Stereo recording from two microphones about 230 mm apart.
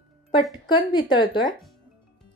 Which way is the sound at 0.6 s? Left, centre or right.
Centre.